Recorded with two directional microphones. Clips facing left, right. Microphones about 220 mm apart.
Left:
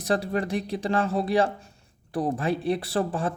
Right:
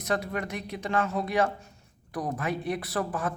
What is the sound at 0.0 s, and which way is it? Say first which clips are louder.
Speech: left 4 dB; 30° left (ahead or behind).